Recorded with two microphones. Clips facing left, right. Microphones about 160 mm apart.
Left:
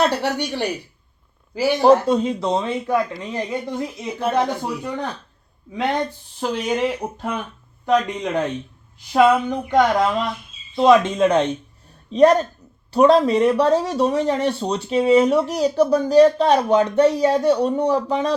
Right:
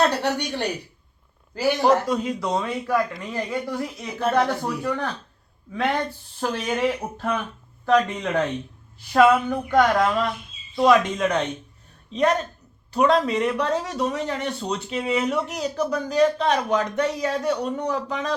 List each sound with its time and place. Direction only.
1.8 s speech: 30° left (ahead or behind)